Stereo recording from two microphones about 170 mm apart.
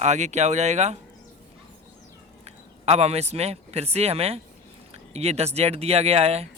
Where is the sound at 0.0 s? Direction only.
45° right (ahead or behind).